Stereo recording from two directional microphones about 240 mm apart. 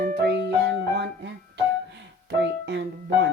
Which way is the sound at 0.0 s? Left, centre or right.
Right.